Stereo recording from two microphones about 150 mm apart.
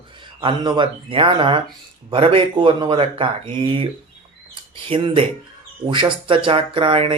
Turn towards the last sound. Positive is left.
turn(degrees=-35)  # may be behind; listen again after turning